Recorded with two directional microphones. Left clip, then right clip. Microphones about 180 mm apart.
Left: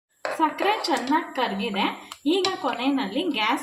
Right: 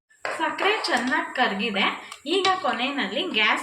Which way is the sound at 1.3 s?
60° left (ahead or behind).